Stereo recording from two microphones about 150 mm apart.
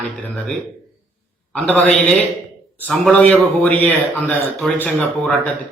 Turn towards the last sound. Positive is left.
turn(degrees=10)  # may be behind; listen again after turning